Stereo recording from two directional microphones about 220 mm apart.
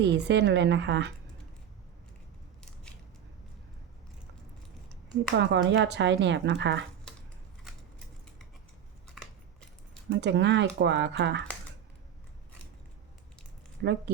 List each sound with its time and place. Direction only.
0.0 s speech: 50° right (ahead or behind)
5.4 s speech: 55° right (ahead or behind)
9.2 s a sound: centre (ahead or behind)
10.1 s speech: 50° right (ahead or behind)
13.8 s speech: 55° right (ahead or behind)